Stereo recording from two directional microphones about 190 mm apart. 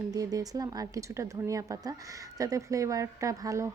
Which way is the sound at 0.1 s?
20° right (ahead or behind).